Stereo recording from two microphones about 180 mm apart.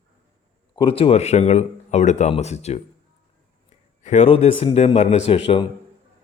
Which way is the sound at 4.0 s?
40° left (ahead or behind).